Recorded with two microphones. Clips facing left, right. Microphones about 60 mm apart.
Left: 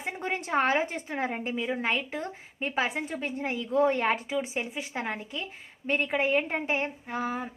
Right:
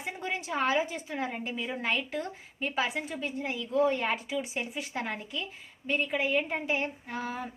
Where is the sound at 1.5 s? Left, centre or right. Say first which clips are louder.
Left 2 dB; centre; by 4.4 s left.